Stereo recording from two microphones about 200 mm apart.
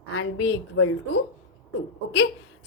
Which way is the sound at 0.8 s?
90° left.